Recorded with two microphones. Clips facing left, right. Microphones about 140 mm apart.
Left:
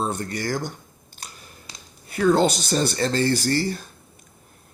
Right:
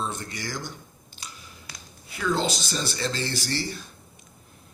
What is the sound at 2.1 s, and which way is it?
Speech, 50° left (ahead or behind).